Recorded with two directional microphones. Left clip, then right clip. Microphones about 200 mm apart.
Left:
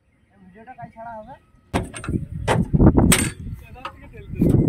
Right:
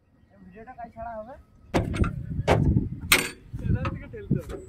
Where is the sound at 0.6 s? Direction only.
20° right (ahead or behind).